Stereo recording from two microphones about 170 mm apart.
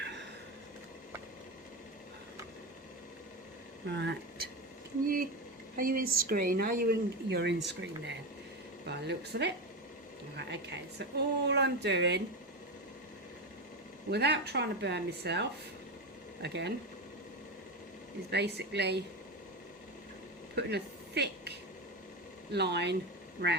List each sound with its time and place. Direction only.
0.0 s a sound: 90° right
3.8 s speech: 90° right
5.7 s speech: 60° right (ahead or behind); by 8.1 s 90° right
8.9 s speech: 80° right
14.1 s speech: 75° right (ahead or behind)
18.3 s speech: 75° right (ahead or behind)
20.6 s a sound: 80° right
22.5 s speech: 80° right